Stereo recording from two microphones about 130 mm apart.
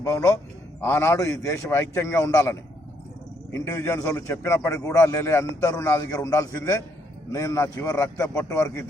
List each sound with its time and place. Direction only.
0.0 s a man's voice: 25° left (ahead or behind)